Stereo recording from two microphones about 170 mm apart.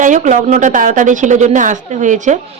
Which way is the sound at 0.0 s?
50° right (ahead or behind).